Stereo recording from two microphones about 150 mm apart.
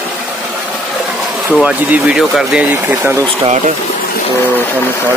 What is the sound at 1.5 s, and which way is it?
Speech, 10° right (ahead or behind).